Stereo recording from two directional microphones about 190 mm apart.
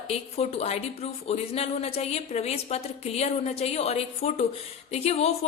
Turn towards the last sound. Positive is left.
turn(degrees=35)  # may be behind; listen again after turning